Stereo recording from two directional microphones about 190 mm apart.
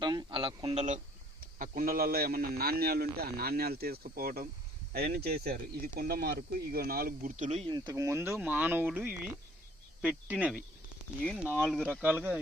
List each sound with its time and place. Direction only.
0.0 s a sound: 20° right (ahead or behind)
1.5 s a man's voice: 45° right (ahead or behind)
7.7 s speech: 20° right (ahead or behind)
11.3 s speech: 5° left (ahead or behind)